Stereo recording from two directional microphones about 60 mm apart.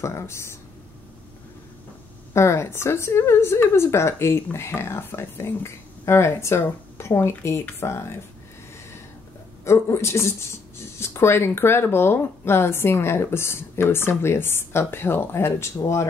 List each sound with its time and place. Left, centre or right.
0.0 s speech: left
2.3 s speech: left
9.7 s speech: left